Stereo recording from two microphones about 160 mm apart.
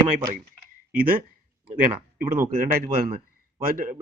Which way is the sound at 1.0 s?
65° right (ahead or behind).